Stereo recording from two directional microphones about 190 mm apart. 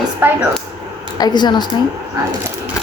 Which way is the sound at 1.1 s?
20° left (ahead or behind).